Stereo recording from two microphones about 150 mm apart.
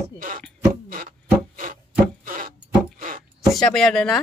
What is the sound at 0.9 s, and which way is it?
Wood, 65° right (ahead or behind).